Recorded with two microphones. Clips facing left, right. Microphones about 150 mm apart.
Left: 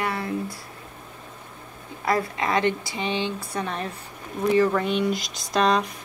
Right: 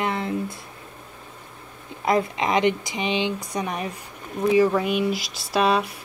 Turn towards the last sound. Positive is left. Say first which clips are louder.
# right 1 dB
turn(degrees=-5)  # may be behind; listen again after turning